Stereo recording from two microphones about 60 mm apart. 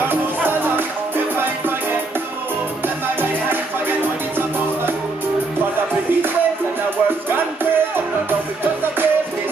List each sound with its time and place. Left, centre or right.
0.1 s music: right
7.2 s music: right